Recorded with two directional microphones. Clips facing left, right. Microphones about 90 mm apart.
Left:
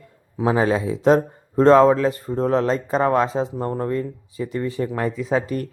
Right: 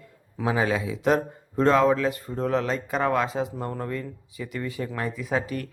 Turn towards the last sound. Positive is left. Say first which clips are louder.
# left 6 dB
turn(degrees=40)  # may be behind; listen again after turning